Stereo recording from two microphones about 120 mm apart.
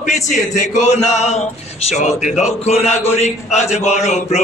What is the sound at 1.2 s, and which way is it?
A man's voice, 70° left (ahead or behind).